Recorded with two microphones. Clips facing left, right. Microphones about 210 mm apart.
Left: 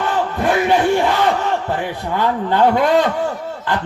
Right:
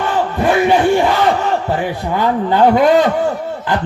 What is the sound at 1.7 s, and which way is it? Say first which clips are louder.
A man's voice: right 3 dB; 10° right (ahead or behind).